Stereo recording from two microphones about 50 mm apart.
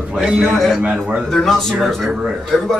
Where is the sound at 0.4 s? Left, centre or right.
Centre.